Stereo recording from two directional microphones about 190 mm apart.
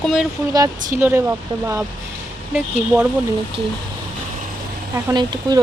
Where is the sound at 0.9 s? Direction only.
15° right (ahead or behind).